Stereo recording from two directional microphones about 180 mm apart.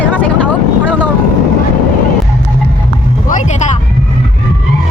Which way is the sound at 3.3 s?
45° left (ahead or behind).